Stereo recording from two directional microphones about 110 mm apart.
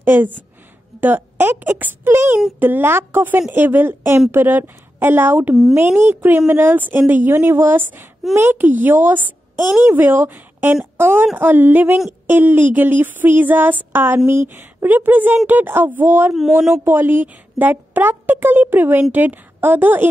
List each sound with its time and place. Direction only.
0.0 s a woman's voice: 20° right (ahead or behind)